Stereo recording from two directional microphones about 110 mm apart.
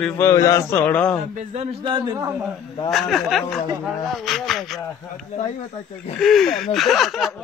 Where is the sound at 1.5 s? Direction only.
90° right.